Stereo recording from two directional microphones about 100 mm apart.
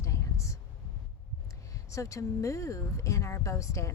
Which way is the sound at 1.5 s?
30° left (ahead or behind).